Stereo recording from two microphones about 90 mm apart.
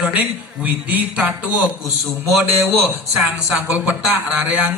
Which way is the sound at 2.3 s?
Centre (ahead or behind).